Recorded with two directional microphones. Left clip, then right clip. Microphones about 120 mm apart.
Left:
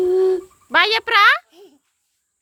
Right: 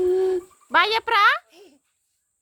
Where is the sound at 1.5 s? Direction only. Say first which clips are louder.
Left 3 dB; 30° right (ahead or behind).